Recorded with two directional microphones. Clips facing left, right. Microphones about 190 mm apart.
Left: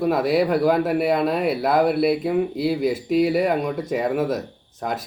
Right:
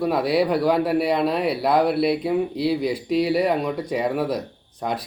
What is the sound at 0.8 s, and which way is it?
Speech, 50° left (ahead or behind).